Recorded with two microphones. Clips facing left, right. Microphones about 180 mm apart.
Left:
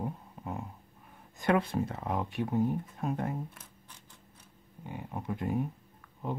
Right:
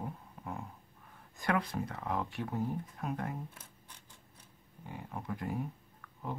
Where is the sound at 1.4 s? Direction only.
25° left (ahead or behind).